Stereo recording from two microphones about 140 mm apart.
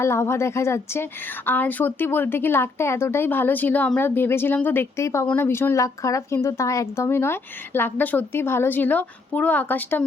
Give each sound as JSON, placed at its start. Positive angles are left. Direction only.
{"t": 0.0, "sound": "speech", "side_deg": 20}